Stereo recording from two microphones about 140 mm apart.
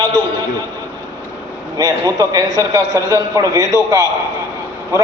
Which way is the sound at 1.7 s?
25° right (ahead or behind).